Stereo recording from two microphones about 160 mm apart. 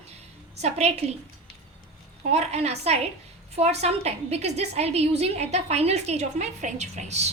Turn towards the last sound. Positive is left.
turn(degrees=-45)  # may be behind; listen again after turning